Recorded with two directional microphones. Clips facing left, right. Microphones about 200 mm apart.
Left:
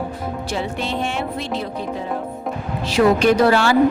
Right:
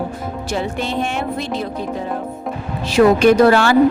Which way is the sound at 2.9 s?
55° right (ahead or behind).